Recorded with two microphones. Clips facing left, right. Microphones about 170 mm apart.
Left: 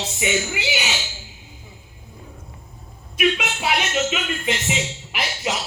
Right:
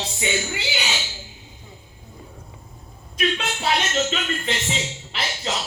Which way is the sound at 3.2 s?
10° left (ahead or behind).